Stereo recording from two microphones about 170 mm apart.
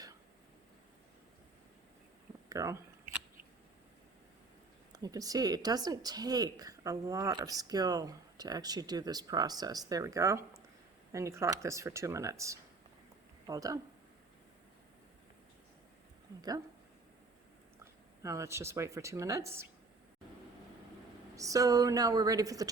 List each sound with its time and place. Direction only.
2.5 s speech: 20° right (ahead or behind)
4.9 s speech: 20° right (ahead or behind)
18.2 s speech: 15° right (ahead or behind)
21.3 s speech: 20° right (ahead or behind)